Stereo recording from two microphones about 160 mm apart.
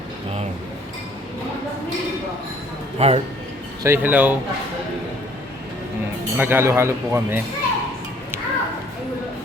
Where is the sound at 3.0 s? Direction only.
40° right (ahead or behind).